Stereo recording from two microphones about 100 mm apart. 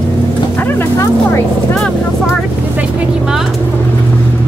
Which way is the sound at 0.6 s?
20° left (ahead or behind).